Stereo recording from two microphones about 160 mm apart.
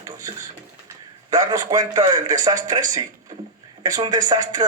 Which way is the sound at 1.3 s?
25° right (ahead or behind).